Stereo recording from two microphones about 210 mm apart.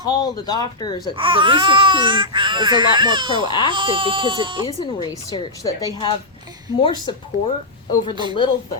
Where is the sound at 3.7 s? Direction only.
25° right (ahead or behind).